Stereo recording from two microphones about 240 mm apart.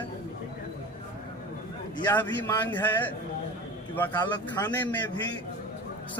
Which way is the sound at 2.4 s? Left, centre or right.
Centre.